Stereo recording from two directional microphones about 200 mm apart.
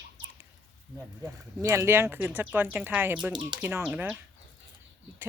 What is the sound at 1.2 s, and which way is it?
Speech, 15° right (ahead or behind).